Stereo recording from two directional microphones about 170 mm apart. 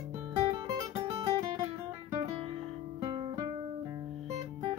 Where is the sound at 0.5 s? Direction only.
20° right (ahead or behind).